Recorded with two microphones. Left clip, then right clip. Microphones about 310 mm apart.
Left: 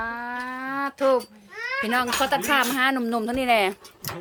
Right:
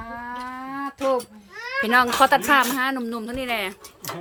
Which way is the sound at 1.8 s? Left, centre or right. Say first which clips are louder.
Right 7 dB; centre.